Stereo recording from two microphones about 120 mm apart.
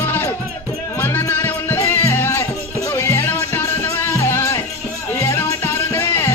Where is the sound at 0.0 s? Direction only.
20° left (ahead or behind).